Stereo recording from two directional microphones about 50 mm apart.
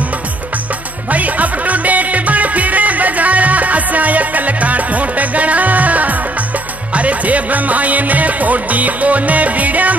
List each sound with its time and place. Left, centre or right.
1.1 s music: right